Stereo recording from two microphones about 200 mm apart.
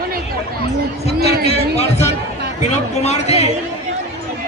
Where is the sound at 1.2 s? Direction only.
50° right (ahead or behind).